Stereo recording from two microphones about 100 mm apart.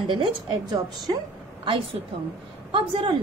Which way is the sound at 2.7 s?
55° right (ahead or behind).